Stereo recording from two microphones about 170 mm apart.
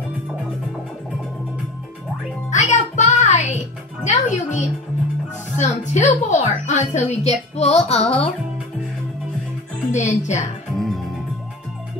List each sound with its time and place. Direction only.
2.5 s music: 45° left (ahead or behind)
9.8 s speech: 45° left (ahead or behind)
10.8 s music: centre (ahead or behind)